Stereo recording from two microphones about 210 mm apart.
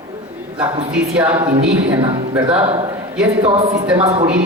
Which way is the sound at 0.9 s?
5° right (ahead or behind).